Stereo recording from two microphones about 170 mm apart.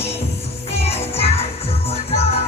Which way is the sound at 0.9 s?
35° left (ahead or behind).